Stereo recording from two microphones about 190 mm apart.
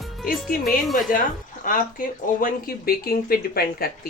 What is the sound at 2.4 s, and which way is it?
Speech, 50° left (ahead or behind).